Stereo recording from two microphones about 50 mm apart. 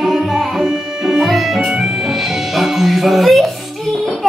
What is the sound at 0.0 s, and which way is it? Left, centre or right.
Music, centre.